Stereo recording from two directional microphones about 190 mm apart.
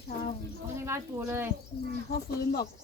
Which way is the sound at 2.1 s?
55° left (ahead or behind).